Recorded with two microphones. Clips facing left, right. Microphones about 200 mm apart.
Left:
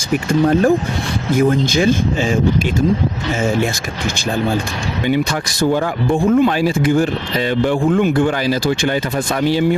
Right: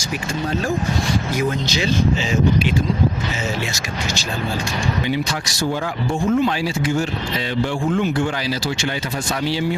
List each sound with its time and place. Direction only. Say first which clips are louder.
0.1 s speech: left 10 dB; 55° left (ahead or behind)
3.4 s speech: left 10 dB; 50° left (ahead or behind)
5.0 s speech: left 5 dB; 55° left (ahead or behind)